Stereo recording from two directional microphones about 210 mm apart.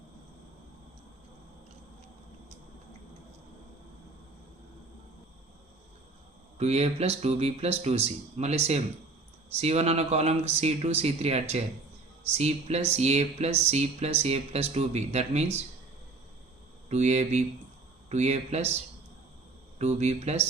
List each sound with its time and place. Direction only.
6.6 s speech: 30° right (ahead or behind)
16.9 s speech: 30° right (ahead or behind)
19.8 s speech: 30° right (ahead or behind)